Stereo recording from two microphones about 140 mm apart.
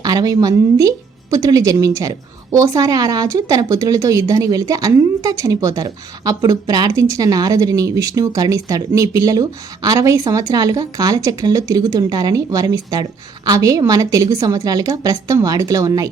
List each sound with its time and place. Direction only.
0.0 s a woman's voice: 25° right (ahead or behind)